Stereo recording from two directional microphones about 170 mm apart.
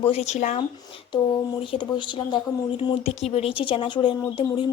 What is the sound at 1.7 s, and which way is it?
Speech, 30° left (ahead or behind).